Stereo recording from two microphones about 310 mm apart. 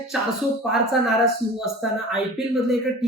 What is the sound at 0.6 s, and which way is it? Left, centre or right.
Speech, centre.